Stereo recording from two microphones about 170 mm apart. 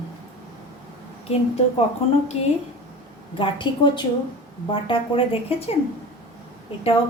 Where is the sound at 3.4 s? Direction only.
30° left (ahead or behind).